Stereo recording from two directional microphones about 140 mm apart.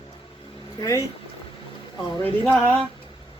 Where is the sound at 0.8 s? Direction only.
25° left (ahead or behind).